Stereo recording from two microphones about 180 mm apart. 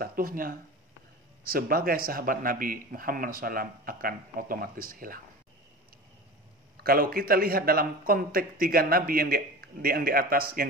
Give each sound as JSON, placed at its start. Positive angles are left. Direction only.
{"t": 0.0, "sound": "speech", "side_deg": -55}
{"t": 6.8, "sound": "a man's voice", "side_deg": -55}